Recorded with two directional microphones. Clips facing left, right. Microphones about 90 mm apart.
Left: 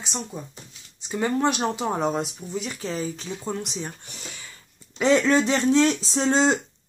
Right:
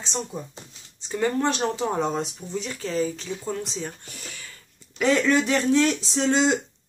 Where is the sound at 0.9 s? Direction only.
15° left (ahead or behind).